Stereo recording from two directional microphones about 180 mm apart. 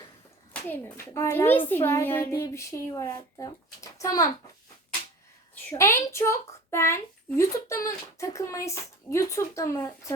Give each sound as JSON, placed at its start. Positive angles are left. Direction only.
{"t": 0.5, "sound": "speech", "side_deg": 15}
{"t": 5.7, "sound": "speech", "side_deg": 15}